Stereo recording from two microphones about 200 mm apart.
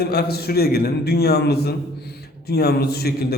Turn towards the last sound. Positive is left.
turn(degrees=50)  # may be behind; listen again after turning